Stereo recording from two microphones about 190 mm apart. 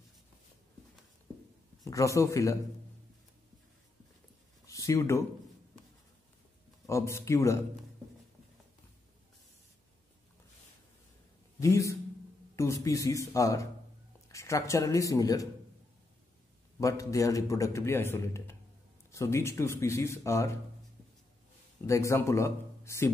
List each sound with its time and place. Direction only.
1.9 s a man's voice: 15° left (ahead or behind)
4.6 s speech: 15° left (ahead or behind)
6.9 s a man's voice: 15° left (ahead or behind)
11.6 s a man's voice: 15° left (ahead or behind)
16.8 s a man's voice: 15° left (ahead or behind)
21.8 s a man's voice: 15° left (ahead or behind)